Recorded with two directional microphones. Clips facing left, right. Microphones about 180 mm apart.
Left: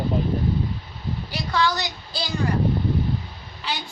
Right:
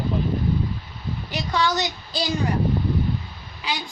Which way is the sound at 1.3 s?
20° right (ahead or behind).